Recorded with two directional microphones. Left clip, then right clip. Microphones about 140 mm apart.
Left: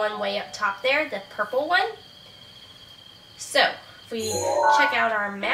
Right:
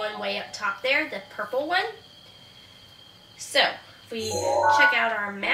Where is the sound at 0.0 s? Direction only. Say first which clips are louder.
Left 4 dB; 5° left (ahead or behind).